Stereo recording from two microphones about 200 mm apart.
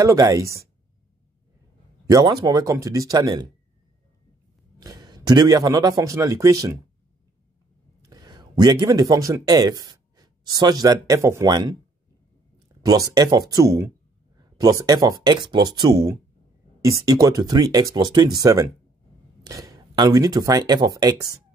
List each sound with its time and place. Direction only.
0.0 s speech: 15° right (ahead or behind)
2.0 s speech: 20° right (ahead or behind)
4.7 s a man's voice: 20° right (ahead or behind)
8.0 s speech: 20° right (ahead or behind)
12.5 s a sound: 15° right (ahead or behind)
13.5 s speech: 15° right (ahead or behind)